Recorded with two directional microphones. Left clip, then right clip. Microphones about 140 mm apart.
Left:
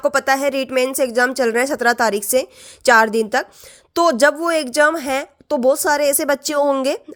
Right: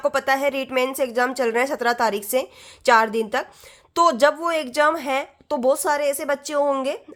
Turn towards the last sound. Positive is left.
turn(degrees=40)  # may be behind; listen again after turning